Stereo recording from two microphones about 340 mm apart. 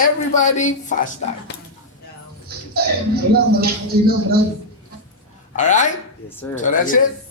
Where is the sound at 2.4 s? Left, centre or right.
Right.